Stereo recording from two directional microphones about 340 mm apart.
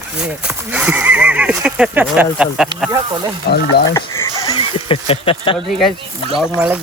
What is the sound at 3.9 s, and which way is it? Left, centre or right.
Speech, centre.